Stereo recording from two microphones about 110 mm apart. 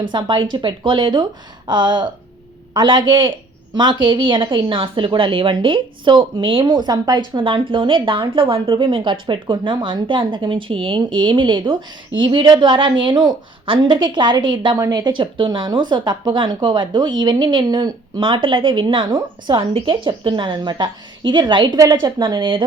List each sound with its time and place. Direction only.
0.0 s a woman's voice: 45° right (ahead or behind)
7.3 s a woman's voice: 50° right (ahead or behind)